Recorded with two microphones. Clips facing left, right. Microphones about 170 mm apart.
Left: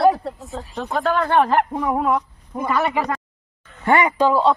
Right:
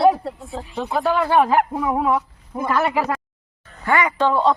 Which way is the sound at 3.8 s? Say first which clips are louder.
Left 2 dB; 25° left (ahead or behind).